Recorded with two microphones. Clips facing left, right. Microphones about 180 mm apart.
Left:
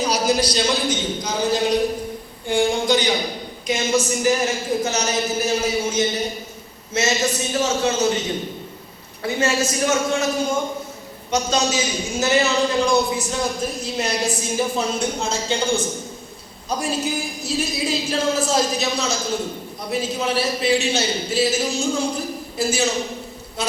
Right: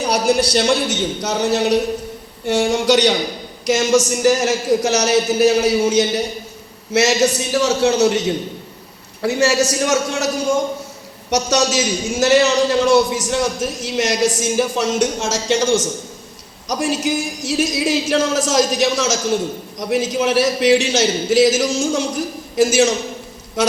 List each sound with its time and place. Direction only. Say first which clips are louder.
0.0 s a man's voice: right 3 dB; 65° right (ahead or behind)
9.2 s a man's voice: right 5 dB; 75° right (ahead or behind)
12.2 s speech: right 5 dB; 90° right